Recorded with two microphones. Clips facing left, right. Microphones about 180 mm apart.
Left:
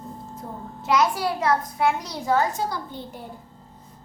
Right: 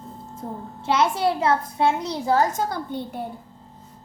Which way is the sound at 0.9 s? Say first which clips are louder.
Right 1 dB; 25° right (ahead or behind).